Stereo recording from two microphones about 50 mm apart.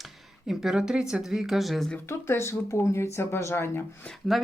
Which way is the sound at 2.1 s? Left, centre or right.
Left.